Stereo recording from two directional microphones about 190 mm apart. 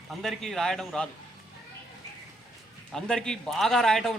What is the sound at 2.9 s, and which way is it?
A man's voice, 5° left (ahead or behind).